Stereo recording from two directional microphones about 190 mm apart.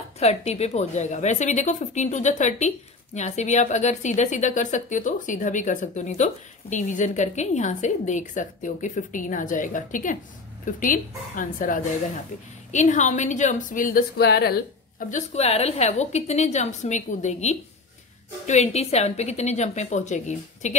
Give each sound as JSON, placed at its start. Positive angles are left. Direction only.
{"t": 0.2, "sound": "a woman's voice", "side_deg": 35}